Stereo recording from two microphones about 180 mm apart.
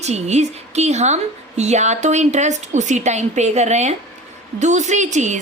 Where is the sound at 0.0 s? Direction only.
40° right (ahead or behind).